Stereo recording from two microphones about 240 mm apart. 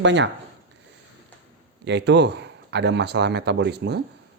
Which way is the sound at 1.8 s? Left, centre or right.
Right.